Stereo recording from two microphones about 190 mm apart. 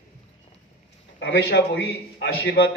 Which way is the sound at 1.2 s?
65° left (ahead or behind).